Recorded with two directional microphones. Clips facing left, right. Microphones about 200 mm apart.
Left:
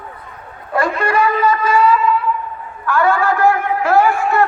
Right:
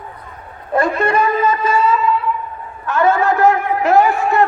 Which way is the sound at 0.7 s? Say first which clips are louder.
Right 1 dB; 20° right (ahead or behind).